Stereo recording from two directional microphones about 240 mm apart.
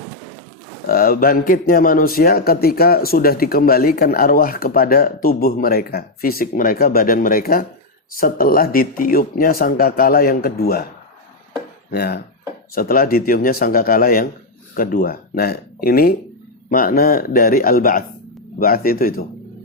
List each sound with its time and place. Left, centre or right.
0.9 s speech: left
11.9 s speech: left